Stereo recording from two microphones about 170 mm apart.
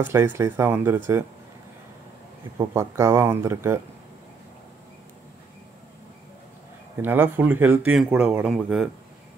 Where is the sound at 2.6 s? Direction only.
15° right (ahead or behind).